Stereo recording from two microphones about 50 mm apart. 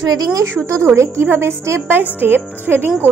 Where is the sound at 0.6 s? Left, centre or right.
Right.